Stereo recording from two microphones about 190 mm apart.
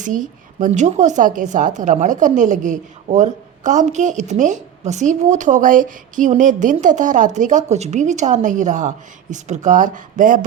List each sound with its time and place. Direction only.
0.0 s a woman's voice: 40° right (ahead or behind)